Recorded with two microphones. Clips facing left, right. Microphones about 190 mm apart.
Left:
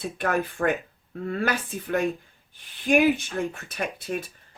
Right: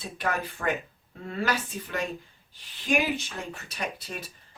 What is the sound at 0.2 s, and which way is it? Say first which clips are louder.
Speech: left 5 dB; 55° left (ahead or behind).